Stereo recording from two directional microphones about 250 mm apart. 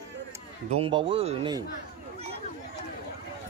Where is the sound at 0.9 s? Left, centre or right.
Right.